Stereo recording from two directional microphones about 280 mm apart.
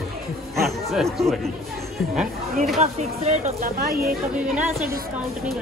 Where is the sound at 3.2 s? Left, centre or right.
Right.